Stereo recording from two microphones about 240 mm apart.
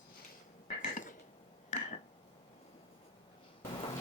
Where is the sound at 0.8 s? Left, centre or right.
Left.